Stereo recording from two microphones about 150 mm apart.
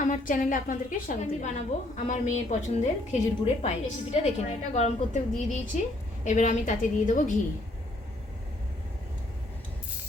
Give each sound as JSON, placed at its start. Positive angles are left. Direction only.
{"t": 0.0, "sound": "a woman's voice", "side_deg": 60}